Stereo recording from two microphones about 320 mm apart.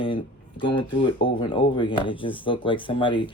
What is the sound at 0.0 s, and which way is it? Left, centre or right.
Speech, centre.